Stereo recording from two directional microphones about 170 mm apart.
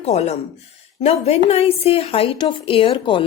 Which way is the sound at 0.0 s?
40° left (ahead or behind).